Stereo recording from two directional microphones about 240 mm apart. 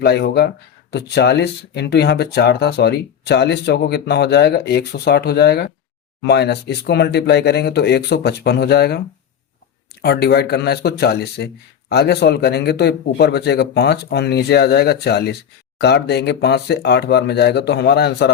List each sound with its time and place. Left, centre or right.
0.0 s speech: left
10.0 s speech: left